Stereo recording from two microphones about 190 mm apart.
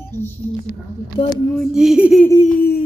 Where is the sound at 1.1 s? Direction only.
30° left (ahead or behind).